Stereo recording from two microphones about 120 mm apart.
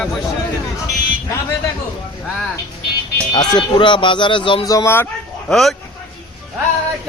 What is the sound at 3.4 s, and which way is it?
Speech, 40° left (ahead or behind).